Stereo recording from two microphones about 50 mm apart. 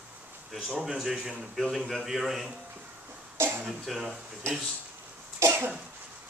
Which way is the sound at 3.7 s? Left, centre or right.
Centre.